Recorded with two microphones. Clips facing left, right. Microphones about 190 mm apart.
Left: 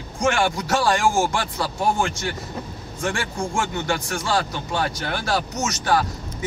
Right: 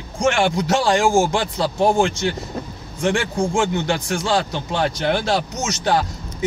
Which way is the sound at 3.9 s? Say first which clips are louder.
Right 3 dB; 25° right (ahead or behind).